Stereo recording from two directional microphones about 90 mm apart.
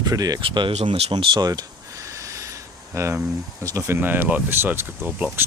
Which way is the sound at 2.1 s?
35° right (ahead or behind).